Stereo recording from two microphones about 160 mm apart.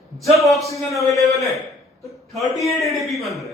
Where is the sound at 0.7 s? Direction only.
20° left (ahead or behind).